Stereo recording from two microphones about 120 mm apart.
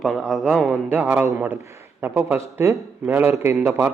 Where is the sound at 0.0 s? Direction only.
Centre (ahead or behind).